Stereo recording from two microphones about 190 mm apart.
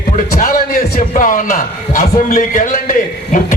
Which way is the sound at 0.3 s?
45° left (ahead or behind).